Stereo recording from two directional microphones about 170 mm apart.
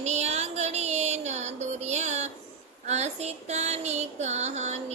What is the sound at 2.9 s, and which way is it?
Female singing, 40° right (ahead or behind).